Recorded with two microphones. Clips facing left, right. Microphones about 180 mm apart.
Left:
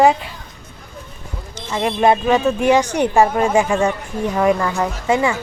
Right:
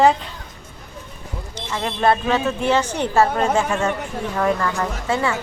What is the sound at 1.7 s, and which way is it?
Speech, 15° left (ahead or behind).